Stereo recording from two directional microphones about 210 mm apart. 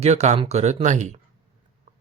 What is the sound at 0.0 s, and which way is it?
Speech, 30° right (ahead or behind).